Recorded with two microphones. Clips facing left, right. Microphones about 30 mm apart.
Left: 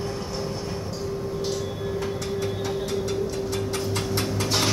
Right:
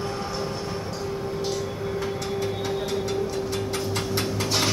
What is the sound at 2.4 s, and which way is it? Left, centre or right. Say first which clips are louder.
Music: even; centre.